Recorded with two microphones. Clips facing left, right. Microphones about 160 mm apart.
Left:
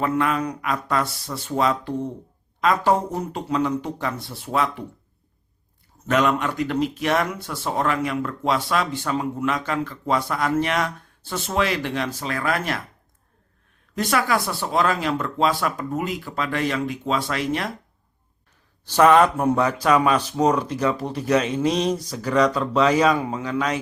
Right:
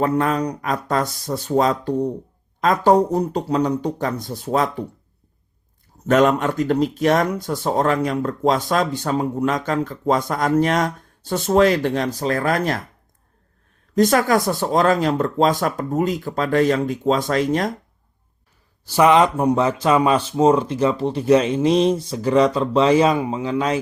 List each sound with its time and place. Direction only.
0.0 s speech: 40° right (ahead or behind)
6.1 s speech: 45° right (ahead or behind)
13.9 s speech: 40° right (ahead or behind)
18.9 s speech: 10° right (ahead or behind); by 23.8 s 30° right (ahead or behind)